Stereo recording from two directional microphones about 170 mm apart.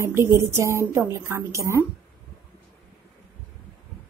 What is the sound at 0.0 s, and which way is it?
Speech, 15° right (ahead or behind).